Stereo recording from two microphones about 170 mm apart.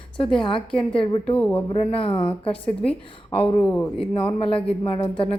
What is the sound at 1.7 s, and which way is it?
Speech, 35° left (ahead or behind).